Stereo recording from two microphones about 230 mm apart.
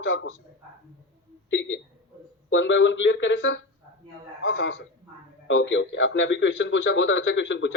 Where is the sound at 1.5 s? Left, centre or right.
Left.